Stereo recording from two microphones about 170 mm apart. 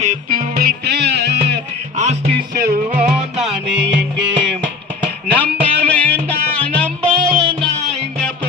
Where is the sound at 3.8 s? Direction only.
90° right.